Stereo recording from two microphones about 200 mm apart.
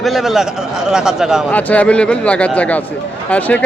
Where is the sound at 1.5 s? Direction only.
10° left (ahead or behind).